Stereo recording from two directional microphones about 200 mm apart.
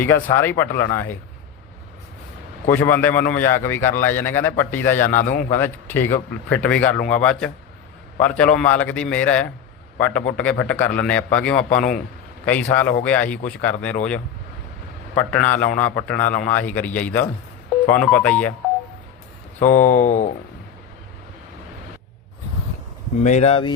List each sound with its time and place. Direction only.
0.0 s a man's voice: 10° left (ahead or behind)
2.6 s a man's voice: 10° left (ahead or behind)
15.1 s a man's voice: 10° left (ahead or behind)
19.5 s speech: 40° left (ahead or behind)
23.2 s speech: 35° left (ahead or behind)